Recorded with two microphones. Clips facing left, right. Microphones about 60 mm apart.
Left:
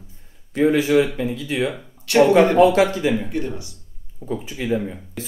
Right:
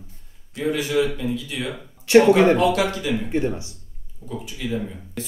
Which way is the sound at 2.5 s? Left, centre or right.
Left.